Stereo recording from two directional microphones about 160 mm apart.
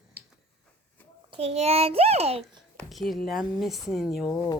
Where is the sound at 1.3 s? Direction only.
40° right (ahead or behind).